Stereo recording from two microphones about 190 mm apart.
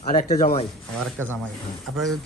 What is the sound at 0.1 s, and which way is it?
Speech, 45° left (ahead or behind).